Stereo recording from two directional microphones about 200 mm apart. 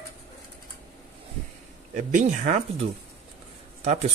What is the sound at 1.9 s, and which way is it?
Speech, 40° right (ahead or behind).